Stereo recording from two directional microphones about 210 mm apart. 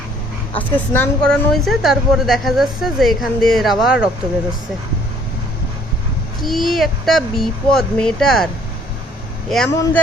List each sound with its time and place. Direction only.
0.5 s a woman's voice: 10° left (ahead or behind)
6.4 s a woman's voice: centre (ahead or behind)
9.5 s a woman's voice: centre (ahead or behind)